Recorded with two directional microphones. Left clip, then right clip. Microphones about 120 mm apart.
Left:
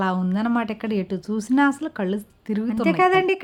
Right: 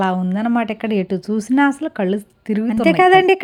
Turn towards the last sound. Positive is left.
turn(degrees=-40)  # may be behind; listen again after turning